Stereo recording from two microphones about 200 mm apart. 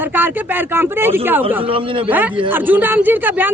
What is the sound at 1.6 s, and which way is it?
Speech, 25° right (ahead or behind).